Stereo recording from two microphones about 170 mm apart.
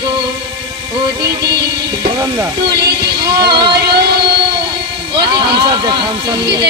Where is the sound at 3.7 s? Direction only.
75° right (ahead or behind).